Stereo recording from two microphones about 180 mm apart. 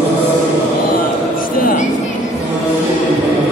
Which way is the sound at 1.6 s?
50° left (ahead or behind).